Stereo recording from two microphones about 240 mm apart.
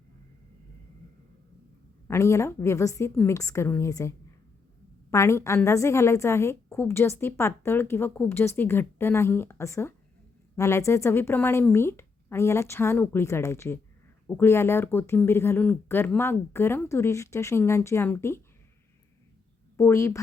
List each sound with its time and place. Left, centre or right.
2.0 s a woman's voice: centre
5.1 s a woman's voice: centre
19.7 s a woman's voice: centre